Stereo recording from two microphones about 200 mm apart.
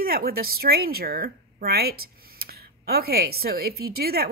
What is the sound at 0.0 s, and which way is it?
Speech, 50° right (ahead or behind).